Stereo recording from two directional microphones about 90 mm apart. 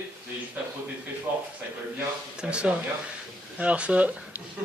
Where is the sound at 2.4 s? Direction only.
10° right (ahead or behind).